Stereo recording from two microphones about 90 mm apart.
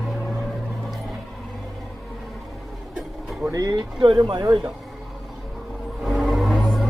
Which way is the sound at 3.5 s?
40° right (ahead or behind).